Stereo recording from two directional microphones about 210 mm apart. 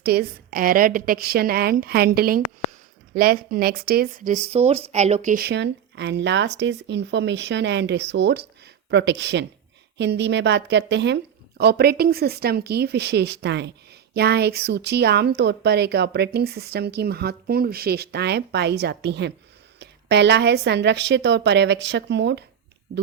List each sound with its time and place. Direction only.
0.0 s a woman's voice: 45° right (ahead or behind)